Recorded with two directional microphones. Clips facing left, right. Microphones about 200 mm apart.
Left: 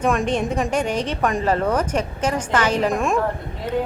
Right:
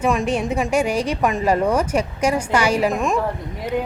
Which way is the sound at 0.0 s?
5° right (ahead or behind).